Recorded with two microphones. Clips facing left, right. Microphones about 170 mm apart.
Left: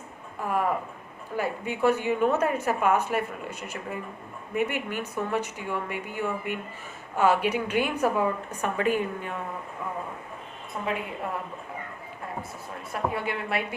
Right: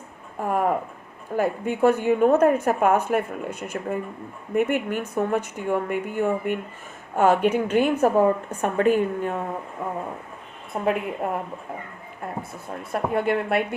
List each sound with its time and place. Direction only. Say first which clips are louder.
0.3 s speech: right 4 dB; 45° right (ahead or behind)
10.8 s a woman's voice: right 7 dB; 55° right (ahead or behind)
12.9 s speech: right 7 dB; 55° right (ahead or behind)